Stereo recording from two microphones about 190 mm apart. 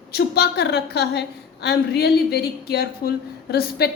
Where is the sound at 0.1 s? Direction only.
55° left (ahead or behind).